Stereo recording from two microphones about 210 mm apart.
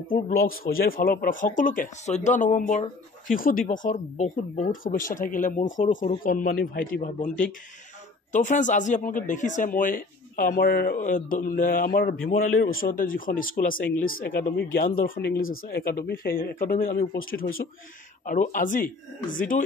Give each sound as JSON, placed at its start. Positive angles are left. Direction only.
{"t": 0.1, "sound": "speech", "side_deg": 45}